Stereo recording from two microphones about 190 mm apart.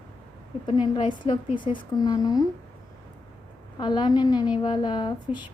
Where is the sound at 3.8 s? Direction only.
20° left (ahead or behind).